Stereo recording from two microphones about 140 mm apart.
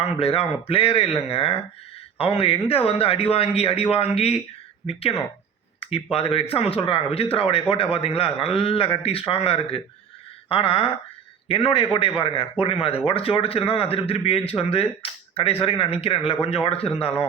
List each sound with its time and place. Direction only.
0.0 s speech: 45° left (ahead or behind)
10.5 s a sound: 40° left (ahead or behind)
12.2 s speech: 40° left (ahead or behind)